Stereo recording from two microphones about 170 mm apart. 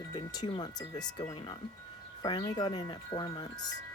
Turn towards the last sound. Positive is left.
turn(degrees=25)  # may be behind; listen again after turning